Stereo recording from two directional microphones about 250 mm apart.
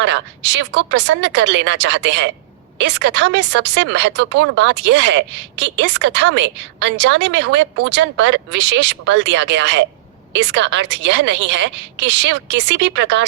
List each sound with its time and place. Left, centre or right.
0.0 s a woman's voice: right